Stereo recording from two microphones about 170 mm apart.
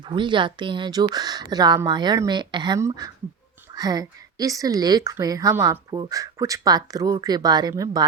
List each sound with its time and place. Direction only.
0.1 s speech: 30° right (ahead or behind)